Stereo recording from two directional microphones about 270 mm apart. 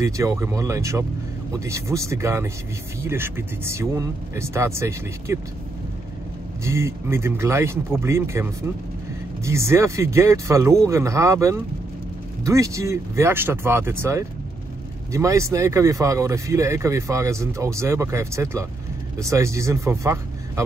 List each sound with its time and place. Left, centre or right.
0.0 s speech: centre
6.6 s speech: centre